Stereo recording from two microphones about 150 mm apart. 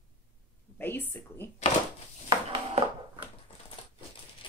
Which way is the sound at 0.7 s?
15° left (ahead or behind).